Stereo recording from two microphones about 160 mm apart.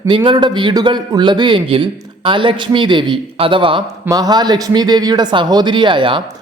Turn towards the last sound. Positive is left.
turn(degrees=-30)  # may be behind; listen again after turning